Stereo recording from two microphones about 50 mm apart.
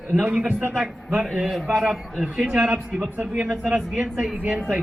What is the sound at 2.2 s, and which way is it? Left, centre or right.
Speech, centre.